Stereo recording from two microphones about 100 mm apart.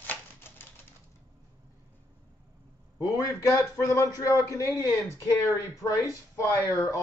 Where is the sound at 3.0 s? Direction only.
35° left (ahead or behind).